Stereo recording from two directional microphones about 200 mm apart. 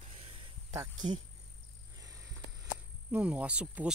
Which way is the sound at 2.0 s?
15° right (ahead or behind).